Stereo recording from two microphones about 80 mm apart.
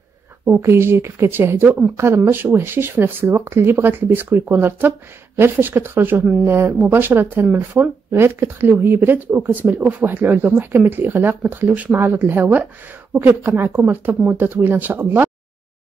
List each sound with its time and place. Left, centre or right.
0.6 s a woman's voice: right
13.4 s speech: right